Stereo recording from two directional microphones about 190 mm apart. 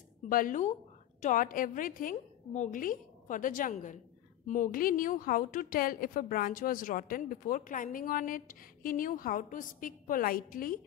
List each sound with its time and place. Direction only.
0.3 s a woman's voice: 45° left (ahead or behind)